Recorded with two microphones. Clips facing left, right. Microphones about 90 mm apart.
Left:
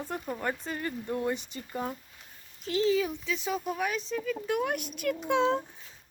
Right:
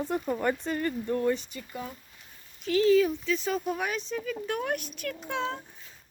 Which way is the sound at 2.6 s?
25° left (ahead or behind).